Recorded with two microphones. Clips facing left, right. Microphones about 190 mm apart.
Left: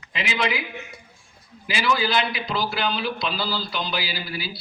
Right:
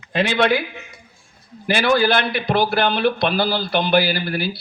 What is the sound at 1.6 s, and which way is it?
A man's voice, 65° right (ahead or behind).